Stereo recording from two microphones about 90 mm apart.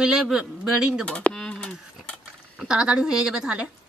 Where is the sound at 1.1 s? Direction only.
10° left (ahead or behind).